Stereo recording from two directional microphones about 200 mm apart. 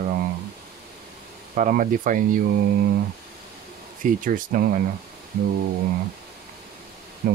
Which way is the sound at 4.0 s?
45° right (ahead or behind).